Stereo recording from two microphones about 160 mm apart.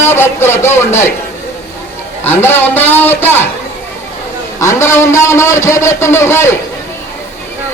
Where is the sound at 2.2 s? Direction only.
10° left (ahead or behind).